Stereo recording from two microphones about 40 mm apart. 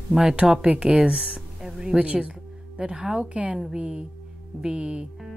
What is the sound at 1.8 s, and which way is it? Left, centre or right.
Speech, right.